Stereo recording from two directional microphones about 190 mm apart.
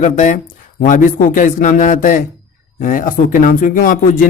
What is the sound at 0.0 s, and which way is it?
Speech, 40° left (ahead or behind).